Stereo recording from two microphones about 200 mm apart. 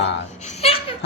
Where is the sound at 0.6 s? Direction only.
25° left (ahead or behind).